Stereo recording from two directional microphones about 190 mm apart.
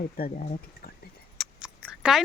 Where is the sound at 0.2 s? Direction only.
50° left (ahead or behind).